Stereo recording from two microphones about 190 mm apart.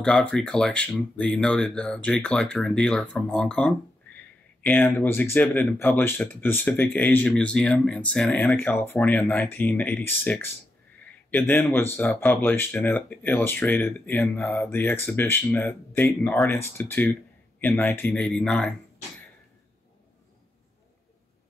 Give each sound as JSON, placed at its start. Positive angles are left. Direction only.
{"t": 0.0, "sound": "speech", "side_deg": 5}